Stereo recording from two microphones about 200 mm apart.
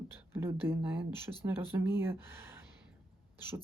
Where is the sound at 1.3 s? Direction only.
20° left (ahead or behind).